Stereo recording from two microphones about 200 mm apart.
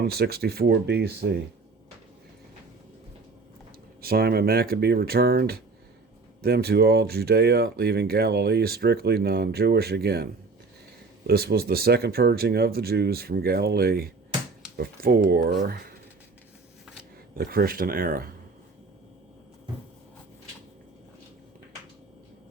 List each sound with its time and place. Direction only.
0.0 s speech: 50° right (ahead or behind)
4.0 s speech: 50° right (ahead or behind)
11.3 s speech: 50° right (ahead or behind)
17.3 s speech: 50° right (ahead or behind)